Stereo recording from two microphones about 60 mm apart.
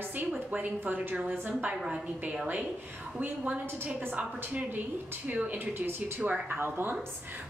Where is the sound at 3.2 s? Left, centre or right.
Right.